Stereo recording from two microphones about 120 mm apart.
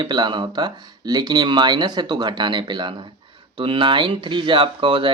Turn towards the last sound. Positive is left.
turn(degrees=-45)  # may be behind; listen again after turning